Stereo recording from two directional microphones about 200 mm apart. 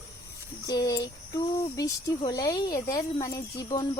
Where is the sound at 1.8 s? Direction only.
20° left (ahead or behind).